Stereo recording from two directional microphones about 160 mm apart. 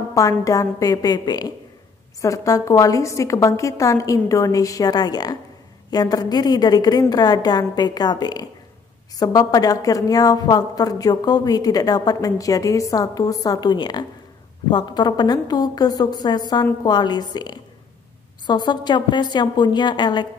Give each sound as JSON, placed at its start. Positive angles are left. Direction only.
{"t": 0.1, "sound": "a woman's voice", "side_deg": 20}